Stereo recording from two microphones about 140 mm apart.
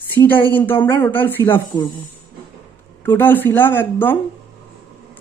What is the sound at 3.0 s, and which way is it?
Speech, 15° left (ahead or behind).